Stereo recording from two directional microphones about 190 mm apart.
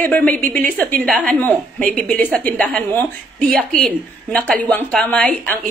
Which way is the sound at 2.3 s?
5° left (ahead or behind).